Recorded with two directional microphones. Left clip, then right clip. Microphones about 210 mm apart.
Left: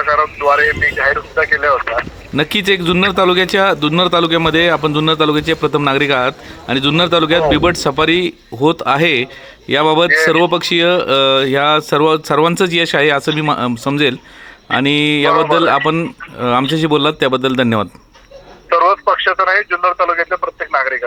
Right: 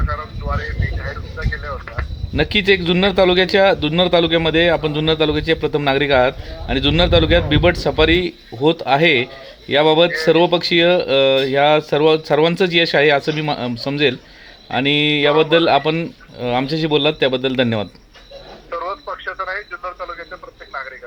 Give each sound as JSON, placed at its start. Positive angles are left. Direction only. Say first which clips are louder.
{"t": 0.0, "sound": "speech", "louder": "left 14 dB", "side_deg": 60}
{"t": 2.3, "sound": "speech", "louder": "left 1 dB", "side_deg": 15}
{"t": 10.1, "sound": "speech", "louder": "left 5 dB", "side_deg": 55}
{"t": 10.3, "sound": "speech", "louder": "left 1 dB", "side_deg": 20}
{"t": 18.7, "sound": "speech", "louder": "left 14 dB", "side_deg": 60}